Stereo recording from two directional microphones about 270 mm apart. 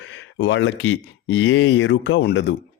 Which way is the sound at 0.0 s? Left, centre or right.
Left.